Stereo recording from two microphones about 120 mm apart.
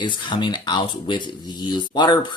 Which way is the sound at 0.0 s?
40° left (ahead or behind).